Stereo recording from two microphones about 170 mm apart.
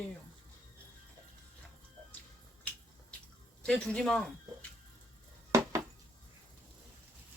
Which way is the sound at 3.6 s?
5° left (ahead or behind).